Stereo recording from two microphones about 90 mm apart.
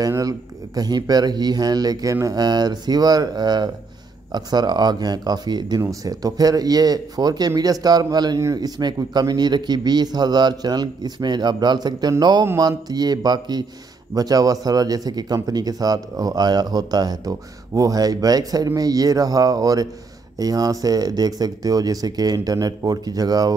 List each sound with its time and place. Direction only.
0.0 s speech: 40° right (ahead or behind)
5.8 s speech: 40° right (ahead or behind)